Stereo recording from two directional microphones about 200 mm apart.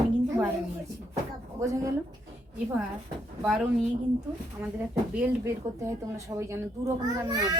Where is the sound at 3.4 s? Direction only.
5° right (ahead or behind).